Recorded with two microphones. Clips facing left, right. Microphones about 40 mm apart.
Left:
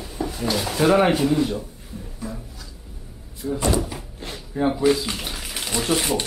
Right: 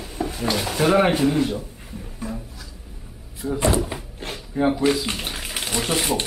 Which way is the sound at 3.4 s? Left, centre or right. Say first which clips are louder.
Right 1 dB; centre.